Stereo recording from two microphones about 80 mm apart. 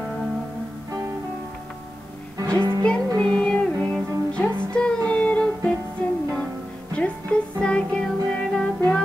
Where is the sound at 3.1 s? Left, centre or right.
Centre.